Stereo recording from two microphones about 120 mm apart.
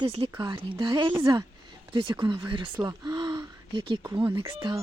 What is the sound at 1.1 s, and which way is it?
Speech, 25° right (ahead or behind).